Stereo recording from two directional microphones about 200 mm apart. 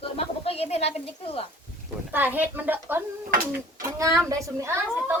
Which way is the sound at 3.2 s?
45° right (ahead or behind).